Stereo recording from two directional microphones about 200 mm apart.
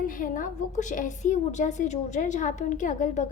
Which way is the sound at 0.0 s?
45° left (ahead or behind).